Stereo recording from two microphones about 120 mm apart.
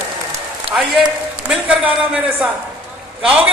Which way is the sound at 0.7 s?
10° right (ahead or behind).